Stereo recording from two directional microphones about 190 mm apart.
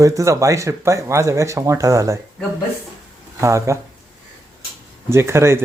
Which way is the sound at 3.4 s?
15° right (ahead or behind).